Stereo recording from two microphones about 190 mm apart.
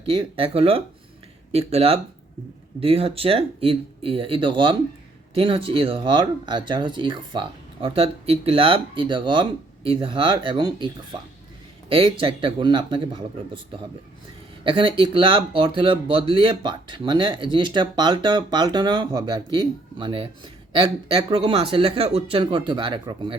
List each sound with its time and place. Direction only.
0.0 s speech: 30° right (ahead or behind)